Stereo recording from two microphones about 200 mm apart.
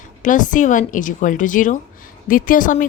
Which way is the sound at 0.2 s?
40° left (ahead or behind).